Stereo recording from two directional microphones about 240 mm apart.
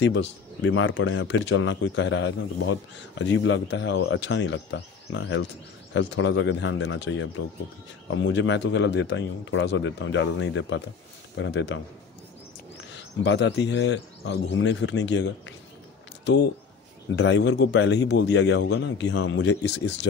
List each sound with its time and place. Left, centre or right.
0.6 s a man's voice: left
12.9 s a man's voice: left
17.1 s a man's voice: left